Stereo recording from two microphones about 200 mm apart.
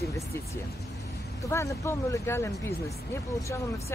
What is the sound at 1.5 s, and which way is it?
Speech, 15° left (ahead or behind).